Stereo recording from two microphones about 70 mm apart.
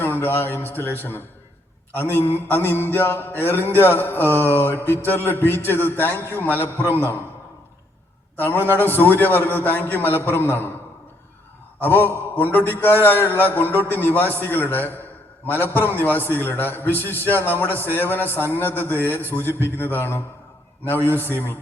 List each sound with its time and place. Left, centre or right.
0.0 s a man's voice: left
8.8 s a man's voice: left
11.8 s a man's voice: left